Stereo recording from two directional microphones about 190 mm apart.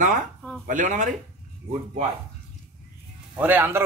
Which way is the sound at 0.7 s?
40° right (ahead or behind).